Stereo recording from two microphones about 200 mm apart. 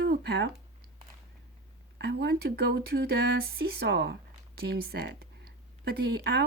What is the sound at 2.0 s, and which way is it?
Speech, 55° right (ahead or behind).